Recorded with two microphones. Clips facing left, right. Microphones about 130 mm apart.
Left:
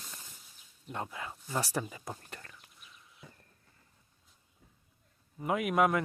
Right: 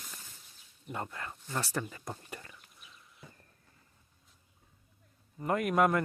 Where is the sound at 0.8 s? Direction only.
Centre (ahead or behind).